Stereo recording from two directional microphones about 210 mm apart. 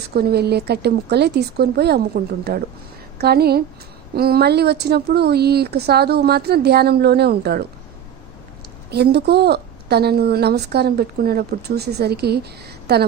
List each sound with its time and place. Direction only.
0.1 s a woman's voice: 50° right (ahead or behind)
8.9 s a woman's voice: 50° right (ahead or behind)